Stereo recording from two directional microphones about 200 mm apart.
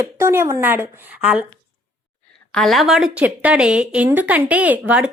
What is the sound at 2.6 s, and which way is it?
Speech, centre (ahead or behind).